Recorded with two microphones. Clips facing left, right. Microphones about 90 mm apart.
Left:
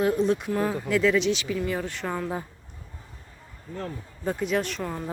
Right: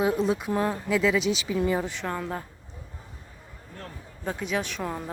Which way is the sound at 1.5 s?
20° right (ahead or behind).